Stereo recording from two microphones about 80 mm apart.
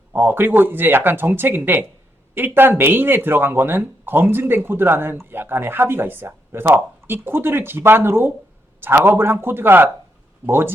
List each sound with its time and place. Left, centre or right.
0.1 s speech: right